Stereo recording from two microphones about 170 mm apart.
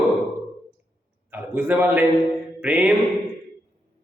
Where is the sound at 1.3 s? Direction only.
10° right (ahead or behind).